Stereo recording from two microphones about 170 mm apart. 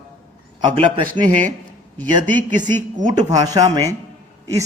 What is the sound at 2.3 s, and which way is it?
Speech, 25° right (ahead or behind).